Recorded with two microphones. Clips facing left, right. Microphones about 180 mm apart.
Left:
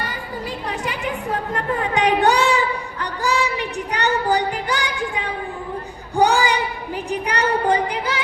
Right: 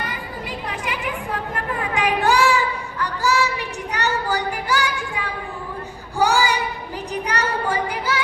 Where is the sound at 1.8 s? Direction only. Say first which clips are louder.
Left 4 dB; 30° left (ahead or behind).